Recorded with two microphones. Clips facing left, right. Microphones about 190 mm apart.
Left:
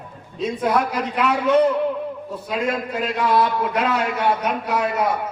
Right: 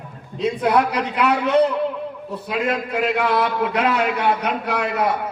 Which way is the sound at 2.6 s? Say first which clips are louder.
Right 4 dB; 65° right (ahead or behind).